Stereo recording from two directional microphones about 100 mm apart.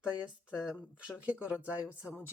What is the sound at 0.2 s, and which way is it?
Speech, 5° right (ahead or behind).